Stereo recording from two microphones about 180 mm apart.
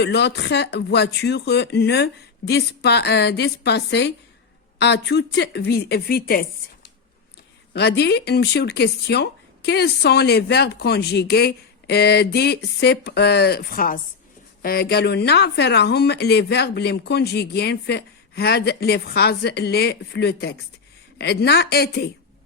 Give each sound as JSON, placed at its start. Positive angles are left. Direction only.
{"t": 0.0, "sound": "speech", "side_deg": 70}
{"t": 7.7, "sound": "speech", "side_deg": 65}